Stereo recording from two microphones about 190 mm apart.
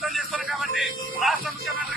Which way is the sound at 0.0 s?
Centre (ahead or behind).